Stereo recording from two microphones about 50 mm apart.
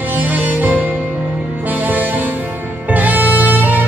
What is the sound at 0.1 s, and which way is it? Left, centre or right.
Music, right.